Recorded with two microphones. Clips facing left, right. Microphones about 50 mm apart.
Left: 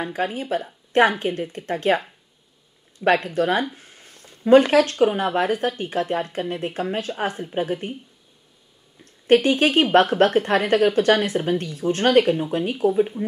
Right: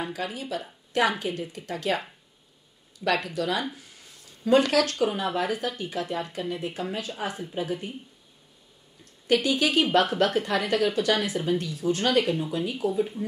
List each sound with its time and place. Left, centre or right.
0.1 s speech: left
3.7 s a sound: left
4.6 s speech: left
9.3 s speech: left